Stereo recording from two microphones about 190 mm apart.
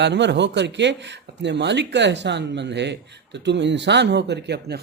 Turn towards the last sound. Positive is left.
turn(degrees=-60)  # may be behind; listen again after turning